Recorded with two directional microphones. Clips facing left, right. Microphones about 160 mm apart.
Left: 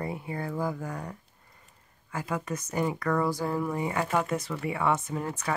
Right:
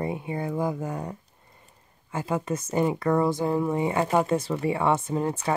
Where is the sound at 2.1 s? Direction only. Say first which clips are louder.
Right 5 dB; 25° right (ahead or behind).